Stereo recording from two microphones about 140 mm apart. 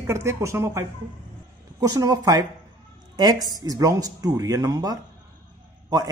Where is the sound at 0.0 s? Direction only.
20° right (ahead or behind).